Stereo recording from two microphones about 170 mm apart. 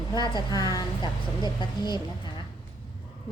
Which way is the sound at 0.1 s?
25° left (ahead or behind).